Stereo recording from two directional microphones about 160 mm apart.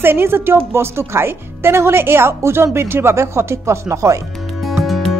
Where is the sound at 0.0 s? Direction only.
15° right (ahead or behind).